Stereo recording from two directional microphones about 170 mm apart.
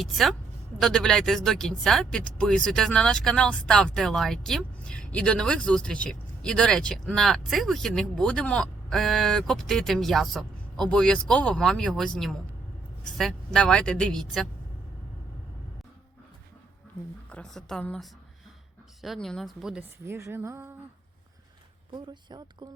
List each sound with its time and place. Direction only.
0.0 s speech: centre (ahead or behind)
17.2 s speech: 5° left (ahead or behind)
20.1 s speech: 15° right (ahead or behind)
21.9 s speech: 25° right (ahead or behind)